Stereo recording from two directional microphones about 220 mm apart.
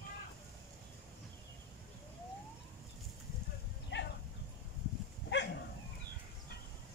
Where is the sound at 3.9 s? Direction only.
55° left (ahead or behind).